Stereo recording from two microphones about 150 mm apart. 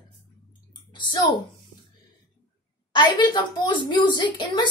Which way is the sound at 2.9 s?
30° left (ahead or behind).